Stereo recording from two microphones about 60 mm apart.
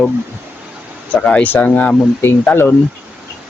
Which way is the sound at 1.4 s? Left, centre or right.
Left.